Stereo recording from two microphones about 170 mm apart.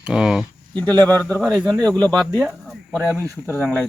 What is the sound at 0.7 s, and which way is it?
Speech, 10° left (ahead or behind).